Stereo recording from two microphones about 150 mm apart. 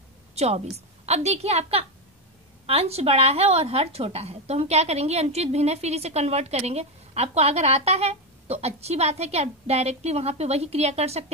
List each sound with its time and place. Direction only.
0.3 s speech: 45° right (ahead or behind)